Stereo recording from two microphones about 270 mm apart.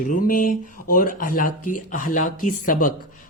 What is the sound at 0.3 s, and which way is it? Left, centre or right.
A woman's voice, left.